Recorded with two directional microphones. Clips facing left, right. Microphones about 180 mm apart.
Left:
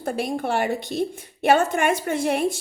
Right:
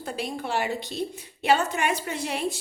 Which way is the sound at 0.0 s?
50° left (ahead or behind).